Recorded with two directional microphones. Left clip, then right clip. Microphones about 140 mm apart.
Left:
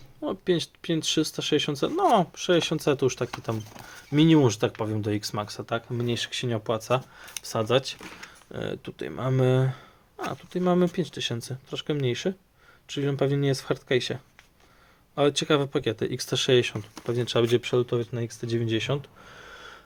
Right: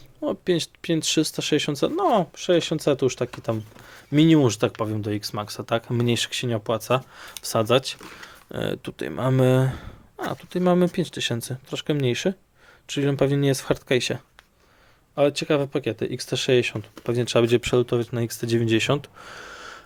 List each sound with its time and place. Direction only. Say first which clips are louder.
0.2 s speech: right 3 dB; 25° right (ahead or behind)
2.0 s speech: even; 10° right (ahead or behind); by 4.9 s 30° right (ahead or behind)
4.9 s speech: right 1 dB; 10° right (ahead or behind)
5.6 s speech: right 8 dB; 50° right (ahead or behind)
6.3 s speech: right 3 dB; 25° right (ahead or behind)
7.3 s speech: right 5 dB; 35° right (ahead or behind)
15.1 s speech: right 2 dB; 15° right (ahead or behind)
17.1 s speech: right 4 dB; 30° right (ahead or behind)